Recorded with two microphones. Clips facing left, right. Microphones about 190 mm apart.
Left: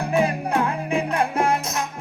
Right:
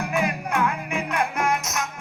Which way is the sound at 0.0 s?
30° left (ahead or behind).